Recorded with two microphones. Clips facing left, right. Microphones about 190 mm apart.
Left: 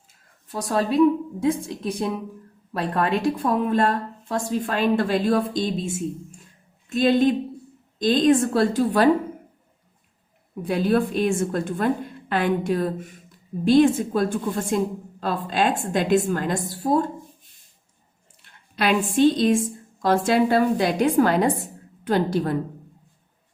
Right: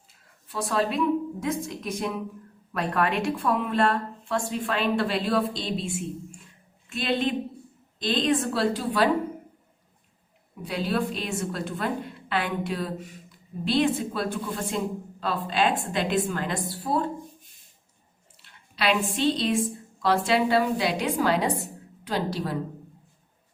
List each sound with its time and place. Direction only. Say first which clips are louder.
0.4 s a woman's voice: left 2 dB; 40° left (ahead or behind)
10.6 s a woman's voice: left 6 dB; 50° left (ahead or behind)
18.4 s a woman's voice: left 3 dB; 50° left (ahead or behind)